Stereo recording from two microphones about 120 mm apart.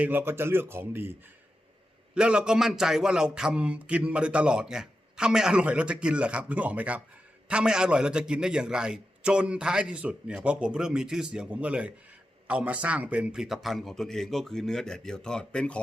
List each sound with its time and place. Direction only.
0.0 s speech: 15° right (ahead or behind)
2.1 s a man's voice: 10° right (ahead or behind); by 15.8 s 10° left (ahead or behind)